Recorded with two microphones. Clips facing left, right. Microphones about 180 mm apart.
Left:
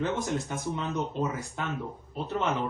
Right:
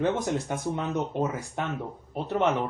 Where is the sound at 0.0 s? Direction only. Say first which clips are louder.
Right 3 dB; 60° right (ahead or behind).